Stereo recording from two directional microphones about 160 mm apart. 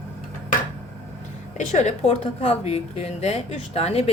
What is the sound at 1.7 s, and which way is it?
A woman's voice, 45° left (ahead or behind).